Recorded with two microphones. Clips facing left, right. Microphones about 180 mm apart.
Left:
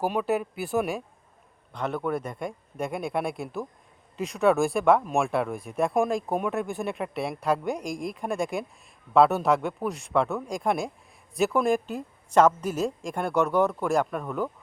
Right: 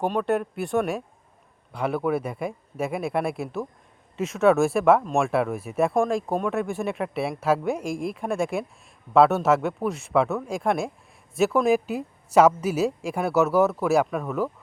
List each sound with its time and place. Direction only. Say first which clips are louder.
0.0 s speech: right 2 dB; 5° left (ahead or behind)